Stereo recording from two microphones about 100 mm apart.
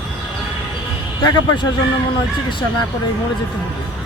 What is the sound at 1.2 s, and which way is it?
Speech, 50° left (ahead or behind).